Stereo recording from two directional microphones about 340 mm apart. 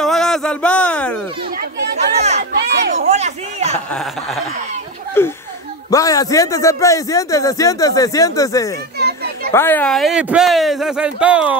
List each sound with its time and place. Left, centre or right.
0.0 s a sound: centre
2.1 s chatter: centre
3.9 s a man's voice: centre
8.9 s children playing: right
9.5 s speech: centre